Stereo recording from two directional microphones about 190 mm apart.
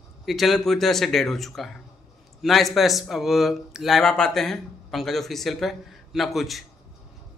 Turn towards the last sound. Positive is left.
turn(degrees=0)  # may be behind; listen again after turning